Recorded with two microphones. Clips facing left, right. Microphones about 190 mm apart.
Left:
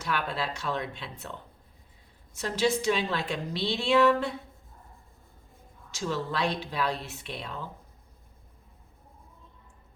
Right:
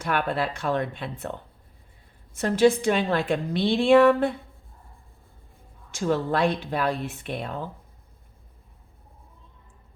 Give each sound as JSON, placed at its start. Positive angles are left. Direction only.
{"t": 0.0, "sound": "a woman's voice", "side_deg": -55}
{"t": 5.9, "sound": "a woman's voice", "side_deg": -55}